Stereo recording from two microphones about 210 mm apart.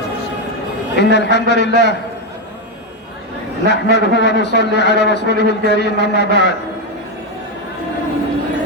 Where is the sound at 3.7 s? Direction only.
55° left (ahead or behind).